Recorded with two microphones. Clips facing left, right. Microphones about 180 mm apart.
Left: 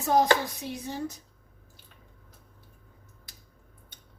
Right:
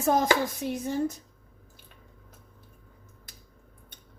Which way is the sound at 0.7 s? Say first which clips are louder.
Right 7 dB; 50° right (ahead or behind).